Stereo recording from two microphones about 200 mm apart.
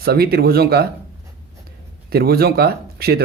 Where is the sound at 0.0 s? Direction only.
50° right (ahead or behind).